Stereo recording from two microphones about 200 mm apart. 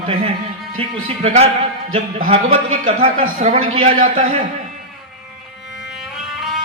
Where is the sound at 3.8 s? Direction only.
40° right (ahead or behind).